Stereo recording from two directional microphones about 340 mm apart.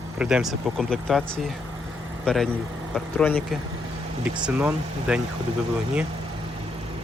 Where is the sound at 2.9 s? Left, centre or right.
Centre.